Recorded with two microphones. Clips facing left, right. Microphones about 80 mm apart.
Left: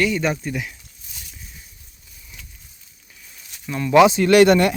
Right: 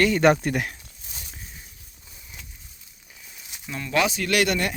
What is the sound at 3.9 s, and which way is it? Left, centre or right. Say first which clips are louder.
Speech: left 10 dB; left.